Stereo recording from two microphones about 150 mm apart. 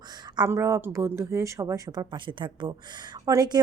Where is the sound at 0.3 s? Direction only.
20° right (ahead or behind).